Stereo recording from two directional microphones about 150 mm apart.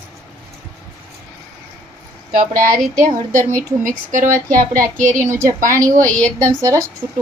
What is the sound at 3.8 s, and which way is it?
Speech, 60° right (ahead or behind).